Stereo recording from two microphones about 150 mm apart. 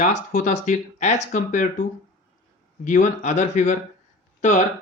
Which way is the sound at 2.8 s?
55° left (ahead or behind).